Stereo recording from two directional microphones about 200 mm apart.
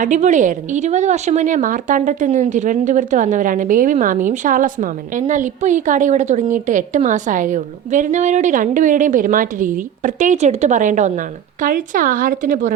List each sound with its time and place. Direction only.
0.0 s a woman's voice: 40° right (ahead or behind)